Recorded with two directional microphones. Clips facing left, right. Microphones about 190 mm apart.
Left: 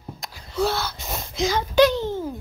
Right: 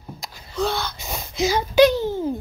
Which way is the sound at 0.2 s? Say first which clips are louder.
Left 1 dB; 5° left (ahead or behind).